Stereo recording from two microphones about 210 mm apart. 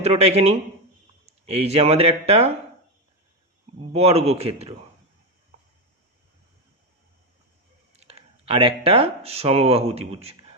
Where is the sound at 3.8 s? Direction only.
30° right (ahead or behind).